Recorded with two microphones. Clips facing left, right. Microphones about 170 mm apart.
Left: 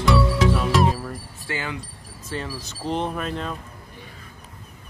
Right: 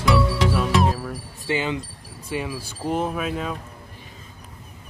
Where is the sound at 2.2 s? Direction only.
10° right (ahead or behind).